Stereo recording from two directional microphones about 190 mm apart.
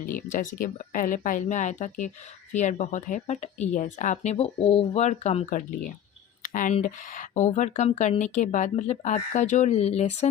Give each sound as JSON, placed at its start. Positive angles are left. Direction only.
{"t": 0.0, "sound": "speech", "side_deg": 45}
{"t": 6.4, "sound": "a sound", "side_deg": 45}
{"t": 6.7, "sound": "speech", "side_deg": 45}